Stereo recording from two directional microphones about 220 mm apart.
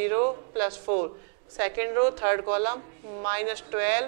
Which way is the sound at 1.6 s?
15° right (ahead or behind).